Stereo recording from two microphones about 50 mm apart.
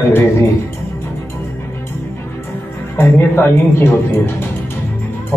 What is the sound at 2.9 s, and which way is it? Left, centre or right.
Speech, left.